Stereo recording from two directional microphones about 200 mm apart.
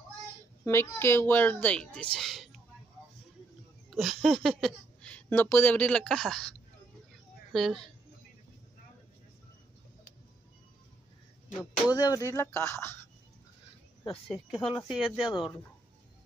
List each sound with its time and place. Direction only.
0.7 s speech: 10° left (ahead or behind)
3.9 s speech: centre (ahead or behind)
7.5 s speech: centre (ahead or behind)
11.7 s speech: 20° left (ahead or behind)
14.2 s speech: centre (ahead or behind)
14.6 s speech: 20° left (ahead or behind)
14.9 s speech: 5° right (ahead or behind)
15.2 s speech: 25° left (ahead or behind)